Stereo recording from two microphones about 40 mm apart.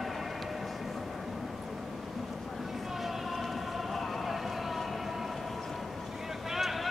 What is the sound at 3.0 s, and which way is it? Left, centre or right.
Siren, centre.